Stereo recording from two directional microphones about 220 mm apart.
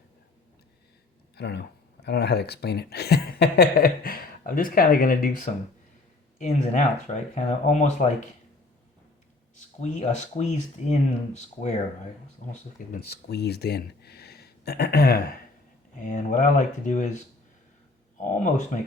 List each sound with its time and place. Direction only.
1.4 s speech: 50° left (ahead or behind); by 8.1 s 30° left (ahead or behind)
9.6 s speech: 30° left (ahead or behind)
16.0 s speech: 35° left (ahead or behind)
18.2 s speech: 35° left (ahead or behind)